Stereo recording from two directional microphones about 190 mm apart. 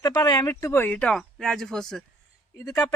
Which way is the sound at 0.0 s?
20° left (ahead or behind).